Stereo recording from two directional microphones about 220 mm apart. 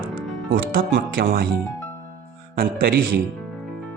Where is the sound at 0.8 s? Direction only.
40° right (ahead or behind).